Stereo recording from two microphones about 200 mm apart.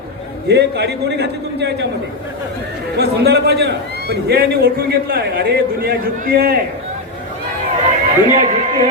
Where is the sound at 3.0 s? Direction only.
55° right (ahead or behind).